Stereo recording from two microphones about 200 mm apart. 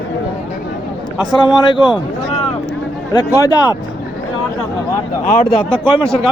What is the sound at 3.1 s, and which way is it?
Speech, 20° left (ahead or behind).